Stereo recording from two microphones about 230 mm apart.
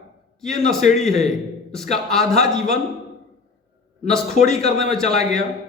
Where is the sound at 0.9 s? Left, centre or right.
Centre.